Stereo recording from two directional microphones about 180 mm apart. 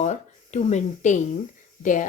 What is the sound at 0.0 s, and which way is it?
Speech, 40° left (ahead or behind).